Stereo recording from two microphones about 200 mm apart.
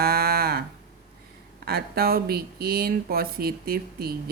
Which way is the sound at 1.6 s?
50° right (ahead or behind).